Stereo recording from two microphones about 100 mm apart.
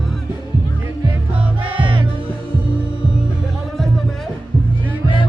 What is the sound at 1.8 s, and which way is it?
Music, 60° right (ahead or behind).